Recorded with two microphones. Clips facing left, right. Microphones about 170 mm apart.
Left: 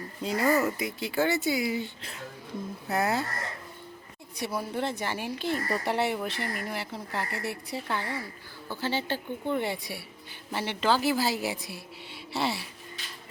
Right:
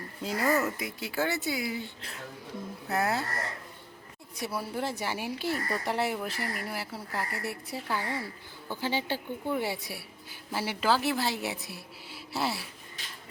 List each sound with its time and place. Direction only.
0.2 s speech: centre (ahead or behind)
4.4 s speech: 5° right (ahead or behind)
8.6 s a woman's voice: 15° right (ahead or behind)